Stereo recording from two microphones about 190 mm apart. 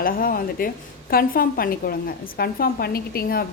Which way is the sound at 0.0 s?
50° left (ahead or behind).